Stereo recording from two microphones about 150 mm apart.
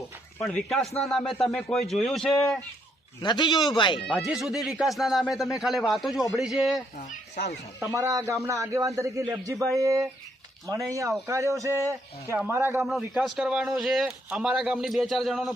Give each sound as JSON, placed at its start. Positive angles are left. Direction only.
{"t": 0.3, "sound": "speech", "side_deg": 5}
{"t": 3.2, "sound": "a man's voice", "side_deg": 30}
{"t": 4.0, "sound": "speech", "side_deg": 0}
{"t": 6.9, "sound": "speech", "side_deg": 60}
{"t": 7.9, "sound": "a man's voice", "side_deg": -20}